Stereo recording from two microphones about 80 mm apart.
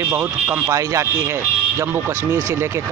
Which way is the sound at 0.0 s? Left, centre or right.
Right.